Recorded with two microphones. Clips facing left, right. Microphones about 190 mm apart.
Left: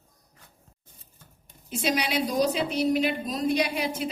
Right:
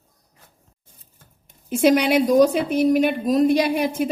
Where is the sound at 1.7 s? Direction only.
55° right (ahead or behind).